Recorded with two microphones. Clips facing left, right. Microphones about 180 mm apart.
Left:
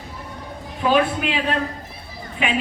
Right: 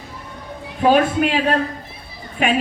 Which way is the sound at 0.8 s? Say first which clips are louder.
Right 4 dB; 45° right (ahead or behind).